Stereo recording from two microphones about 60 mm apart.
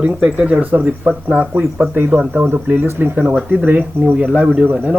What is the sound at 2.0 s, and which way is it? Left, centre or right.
Speech, right.